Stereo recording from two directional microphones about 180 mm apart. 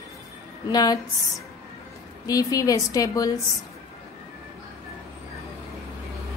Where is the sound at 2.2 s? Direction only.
20° left (ahead or behind).